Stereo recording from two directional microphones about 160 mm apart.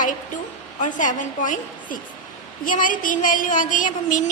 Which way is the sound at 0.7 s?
55° left (ahead or behind).